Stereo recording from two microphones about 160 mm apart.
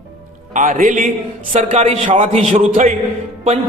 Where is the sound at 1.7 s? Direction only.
45° right (ahead or behind).